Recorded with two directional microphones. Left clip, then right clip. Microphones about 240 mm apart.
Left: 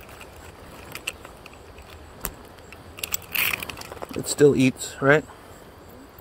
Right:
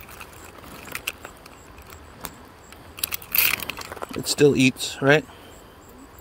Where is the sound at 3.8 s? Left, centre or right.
Centre.